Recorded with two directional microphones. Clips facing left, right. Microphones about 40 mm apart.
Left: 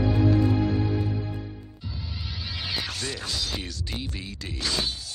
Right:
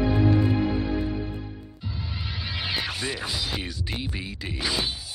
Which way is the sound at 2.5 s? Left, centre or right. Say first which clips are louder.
Right 2 dB; centre.